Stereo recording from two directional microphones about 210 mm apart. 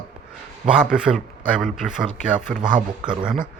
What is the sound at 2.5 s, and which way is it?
Speech, 40° right (ahead or behind).